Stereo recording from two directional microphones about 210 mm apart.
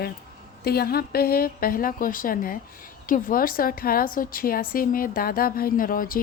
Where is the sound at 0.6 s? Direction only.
50° left (ahead or behind).